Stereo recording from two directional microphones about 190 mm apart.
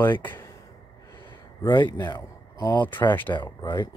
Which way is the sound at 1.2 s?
25° left (ahead or behind).